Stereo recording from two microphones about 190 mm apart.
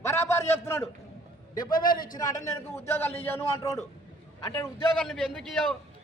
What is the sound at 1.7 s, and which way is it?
Speech, 50° left (ahead or behind).